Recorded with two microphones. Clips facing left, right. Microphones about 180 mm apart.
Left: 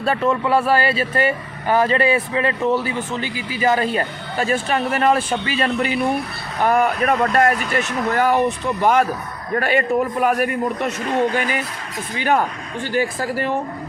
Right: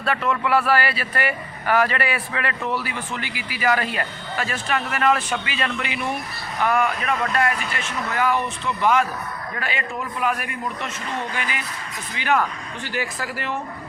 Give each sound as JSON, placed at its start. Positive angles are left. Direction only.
{"t": 0.0, "sound": "a man's voice", "side_deg": 30}